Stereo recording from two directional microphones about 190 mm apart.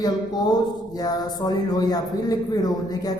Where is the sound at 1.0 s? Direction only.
20° left (ahead or behind).